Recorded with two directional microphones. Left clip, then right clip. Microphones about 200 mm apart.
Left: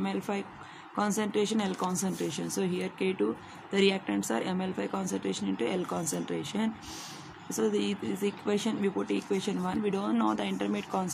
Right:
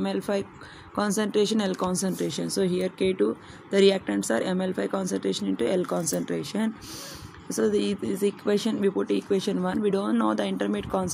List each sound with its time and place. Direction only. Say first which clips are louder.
0.0 s speech: right 6 dB; 25° right (ahead or behind)